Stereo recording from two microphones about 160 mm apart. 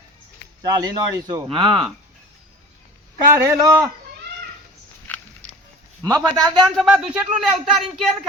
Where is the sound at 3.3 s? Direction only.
20° right (ahead or behind).